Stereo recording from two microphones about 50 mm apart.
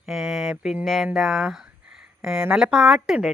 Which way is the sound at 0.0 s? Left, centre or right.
Centre.